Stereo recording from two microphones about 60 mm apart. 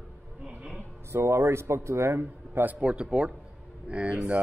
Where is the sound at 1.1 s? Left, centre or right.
Right.